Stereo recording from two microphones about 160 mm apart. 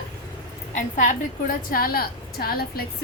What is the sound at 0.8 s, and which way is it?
Speech, 50° left (ahead or behind).